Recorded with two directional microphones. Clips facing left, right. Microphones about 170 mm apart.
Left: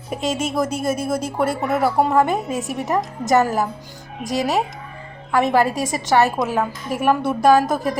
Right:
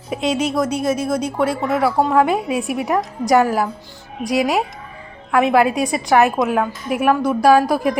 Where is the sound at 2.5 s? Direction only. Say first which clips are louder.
Right 4 dB; 40° left (ahead or behind).